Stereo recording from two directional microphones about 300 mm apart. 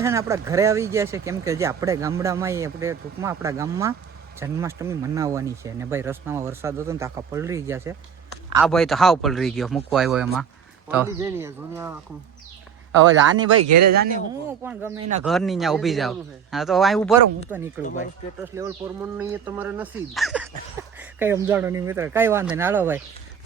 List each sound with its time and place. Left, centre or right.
0.0 s speech: centre
13.6 s a man's voice: right
14.6 s speech: centre